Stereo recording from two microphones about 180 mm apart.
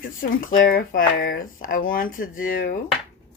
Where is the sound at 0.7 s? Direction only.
55° left (ahead or behind).